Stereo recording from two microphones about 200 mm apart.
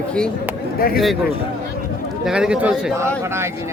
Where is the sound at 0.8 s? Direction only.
50° left (ahead or behind).